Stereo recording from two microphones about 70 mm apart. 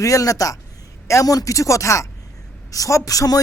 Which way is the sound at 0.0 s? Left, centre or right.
Left.